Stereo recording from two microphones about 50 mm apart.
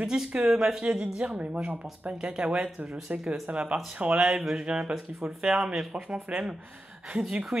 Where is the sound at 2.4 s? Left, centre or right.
Centre.